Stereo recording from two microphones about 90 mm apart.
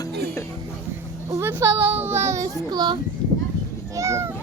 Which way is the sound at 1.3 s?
25° right (ahead or behind).